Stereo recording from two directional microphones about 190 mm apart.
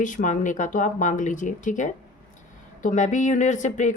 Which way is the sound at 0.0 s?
40° left (ahead or behind).